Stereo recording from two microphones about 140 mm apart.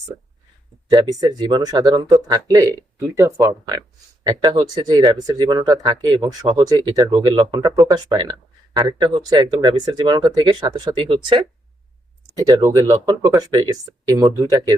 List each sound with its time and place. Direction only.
0.9 s speech: 25° right (ahead or behind)